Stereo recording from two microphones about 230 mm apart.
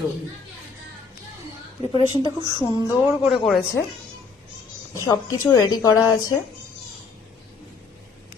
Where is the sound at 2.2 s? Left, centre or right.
Centre.